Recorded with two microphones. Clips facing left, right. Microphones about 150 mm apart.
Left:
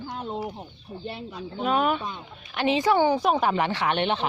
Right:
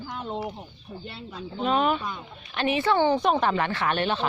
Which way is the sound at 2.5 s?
15° left (ahead or behind).